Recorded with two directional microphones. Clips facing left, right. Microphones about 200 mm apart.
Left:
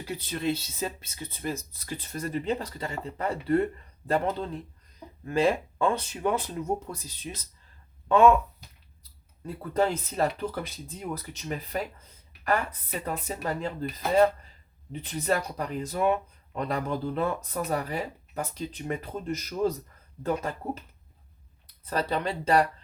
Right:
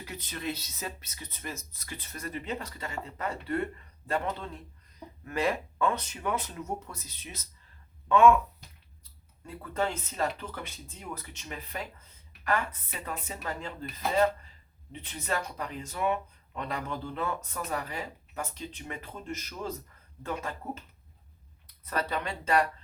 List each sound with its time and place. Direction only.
0.0 s speech: 30° left (ahead or behind)
9.4 s speech: 35° left (ahead or behind)
15.2 s speech: 35° left (ahead or behind)
21.8 s speech: 30° left (ahead or behind)